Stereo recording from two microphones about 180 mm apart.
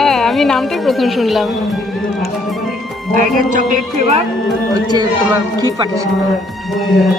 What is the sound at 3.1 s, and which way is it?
Speech, 45° right (ahead or behind).